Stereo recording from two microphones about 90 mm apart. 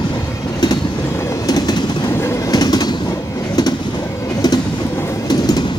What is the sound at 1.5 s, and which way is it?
Train, 45° left (ahead or behind).